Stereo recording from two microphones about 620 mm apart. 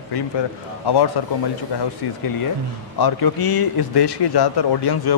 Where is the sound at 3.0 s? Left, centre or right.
Left.